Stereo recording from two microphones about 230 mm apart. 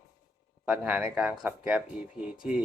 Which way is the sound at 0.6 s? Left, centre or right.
Centre.